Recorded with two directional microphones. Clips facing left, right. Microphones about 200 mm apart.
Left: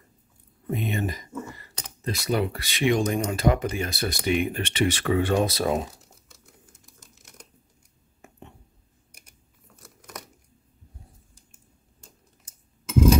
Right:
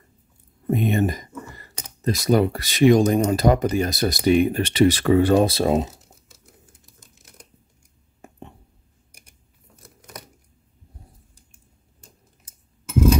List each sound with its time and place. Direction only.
0.7 s speech: 45° right (ahead or behind); by 5.9 s 25° right (ahead or behind)